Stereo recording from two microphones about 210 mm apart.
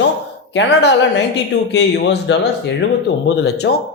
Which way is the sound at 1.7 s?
55° left (ahead or behind).